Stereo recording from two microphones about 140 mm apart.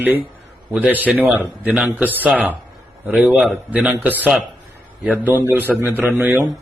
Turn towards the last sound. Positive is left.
turn(degrees=-15)  # may be behind; listen again after turning